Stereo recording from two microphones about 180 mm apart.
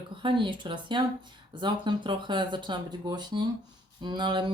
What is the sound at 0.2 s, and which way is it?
Speech, 25° right (ahead or behind).